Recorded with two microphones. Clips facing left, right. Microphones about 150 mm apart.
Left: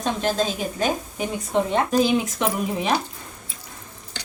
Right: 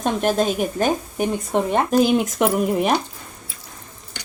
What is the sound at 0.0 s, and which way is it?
A woman's voice, 55° right (ahead or behind).